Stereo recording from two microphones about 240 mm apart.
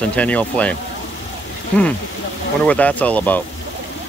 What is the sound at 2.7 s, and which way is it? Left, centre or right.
Speech, centre.